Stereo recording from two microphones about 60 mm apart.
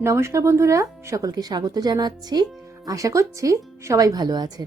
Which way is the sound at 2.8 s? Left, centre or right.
Right.